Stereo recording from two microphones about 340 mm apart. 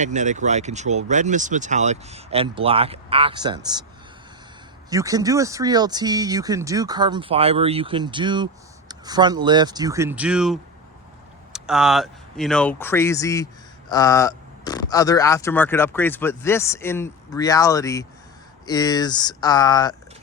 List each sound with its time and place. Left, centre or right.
0.0 s speech: right
4.9 s speech: centre